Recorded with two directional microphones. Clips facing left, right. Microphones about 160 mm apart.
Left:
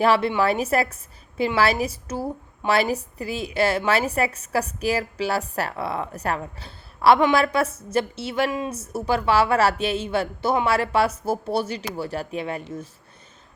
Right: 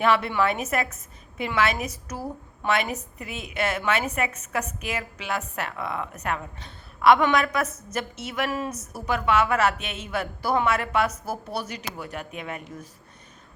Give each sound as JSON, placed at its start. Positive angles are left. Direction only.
{"t": 0.0, "sound": "a woman's voice", "side_deg": 30}
{"t": 8.4, "sound": "speech", "side_deg": 20}
{"t": 8.7, "sound": "a woman's voice", "side_deg": 30}